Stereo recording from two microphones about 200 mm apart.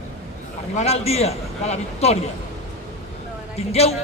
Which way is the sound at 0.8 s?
30° left (ahead or behind).